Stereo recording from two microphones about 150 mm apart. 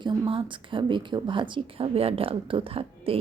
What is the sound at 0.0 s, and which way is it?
A woman's voice, 35° right (ahead or behind).